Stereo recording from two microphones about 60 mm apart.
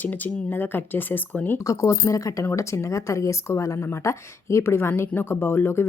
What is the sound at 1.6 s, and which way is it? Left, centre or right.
Speech, left.